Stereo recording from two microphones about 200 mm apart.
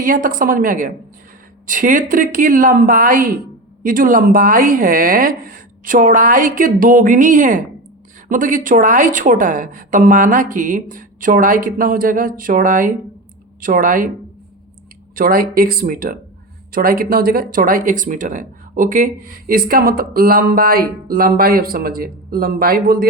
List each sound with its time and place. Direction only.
0.0 s a woman's voice: 40° right (ahead or behind)
15.1 s speech: 45° right (ahead or behind)